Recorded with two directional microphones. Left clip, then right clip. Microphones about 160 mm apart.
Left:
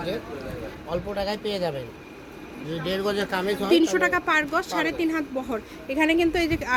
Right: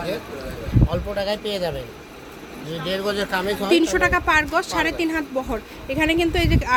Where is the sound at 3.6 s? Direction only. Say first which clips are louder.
Right 2 dB; 15° right (ahead or behind).